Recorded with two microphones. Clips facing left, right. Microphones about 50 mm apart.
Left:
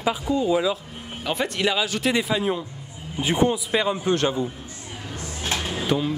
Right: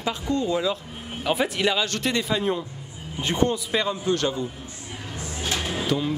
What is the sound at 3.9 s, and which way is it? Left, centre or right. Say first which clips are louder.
Speech: left 2 dB; left.